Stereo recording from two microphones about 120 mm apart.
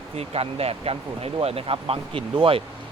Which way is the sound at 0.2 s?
55° right (ahead or behind).